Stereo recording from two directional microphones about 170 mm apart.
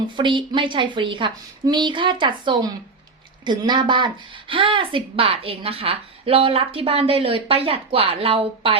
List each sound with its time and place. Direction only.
0.2 s a woman's voice: 30° right (ahead or behind)